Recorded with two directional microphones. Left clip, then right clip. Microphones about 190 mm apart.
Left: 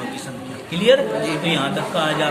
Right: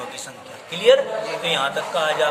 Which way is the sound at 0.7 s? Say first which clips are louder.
Even; 35° right (ahead or behind).